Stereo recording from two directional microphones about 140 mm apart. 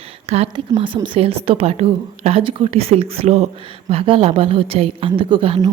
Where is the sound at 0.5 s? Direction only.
35° right (ahead or behind).